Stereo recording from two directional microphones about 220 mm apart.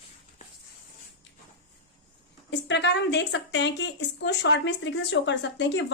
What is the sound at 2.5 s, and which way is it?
A woman's voice, 50° left (ahead or behind).